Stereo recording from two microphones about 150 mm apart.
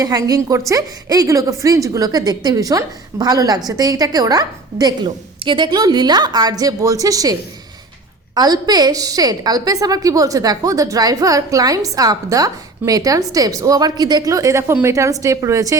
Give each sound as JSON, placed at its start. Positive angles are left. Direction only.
{"t": 0.0, "sound": "a woman's voice", "side_deg": -25}
{"t": 8.4, "sound": "a woman's voice", "side_deg": -25}